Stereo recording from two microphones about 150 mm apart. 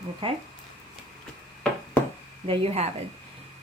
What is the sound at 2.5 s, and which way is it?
Speech, 45° right (ahead or behind).